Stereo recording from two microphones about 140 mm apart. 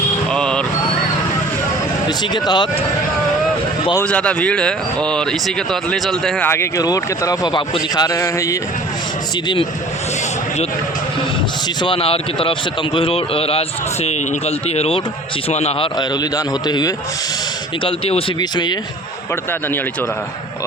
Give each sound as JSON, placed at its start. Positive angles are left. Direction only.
{"t": 0.3, "sound": "a sound", "side_deg": 5}
{"t": 2.0, "sound": "a man's voice", "side_deg": 30}
{"t": 4.0, "sound": "speech", "side_deg": 10}
{"t": 6.5, "sound": "a man's voice", "side_deg": 20}
{"t": 11.8, "sound": "a man's voice", "side_deg": 40}
{"t": 16.0, "sound": "a man's voice", "side_deg": 30}
{"t": 17.8, "sound": "a man's voice", "side_deg": 40}
{"t": 18.3, "sound": "a man's voice", "side_deg": 30}